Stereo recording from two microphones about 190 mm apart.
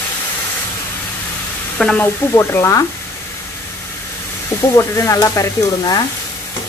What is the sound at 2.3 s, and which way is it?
Frying, 15° left (ahead or behind).